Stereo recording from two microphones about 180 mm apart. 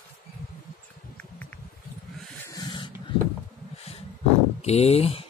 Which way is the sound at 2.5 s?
25° left (ahead or behind).